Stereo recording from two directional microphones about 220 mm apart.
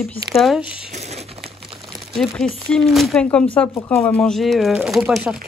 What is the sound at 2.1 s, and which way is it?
Speech, centre (ahead or behind).